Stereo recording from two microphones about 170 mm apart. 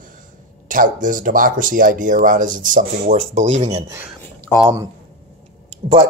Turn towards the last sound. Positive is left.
turn(degrees=-40)  # may be behind; listen again after turning